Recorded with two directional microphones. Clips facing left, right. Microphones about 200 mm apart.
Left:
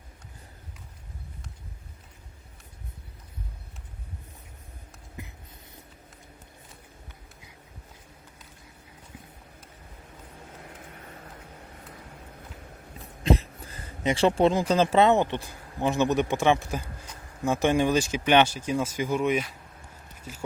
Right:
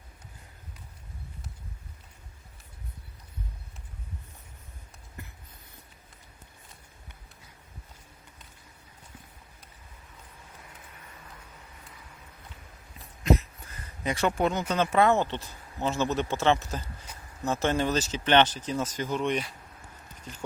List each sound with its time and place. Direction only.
10.6 s vehicle: 45° left (ahead or behind)
13.2 s speech: 30° left (ahead or behind); by 20.4 s 5° left (ahead or behind)